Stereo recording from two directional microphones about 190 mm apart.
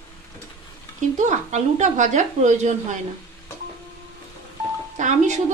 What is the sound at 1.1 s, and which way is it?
A woman's voice, 40° right (ahead or behind).